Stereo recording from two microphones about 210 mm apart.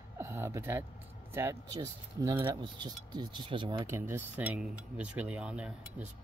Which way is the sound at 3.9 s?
10° right (ahead or behind).